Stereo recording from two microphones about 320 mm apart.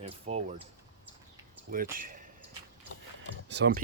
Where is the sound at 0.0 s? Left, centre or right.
Centre.